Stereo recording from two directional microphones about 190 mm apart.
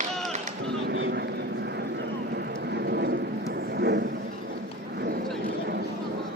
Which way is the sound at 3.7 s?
60° right (ahead or behind).